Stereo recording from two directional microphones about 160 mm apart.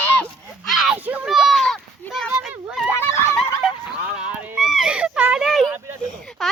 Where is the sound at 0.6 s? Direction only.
5° right (ahead or behind).